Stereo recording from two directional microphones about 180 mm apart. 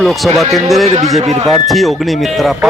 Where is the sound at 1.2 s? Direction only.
40° right (ahead or behind).